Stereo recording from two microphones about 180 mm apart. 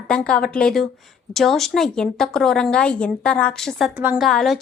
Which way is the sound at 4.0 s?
10° right (ahead or behind).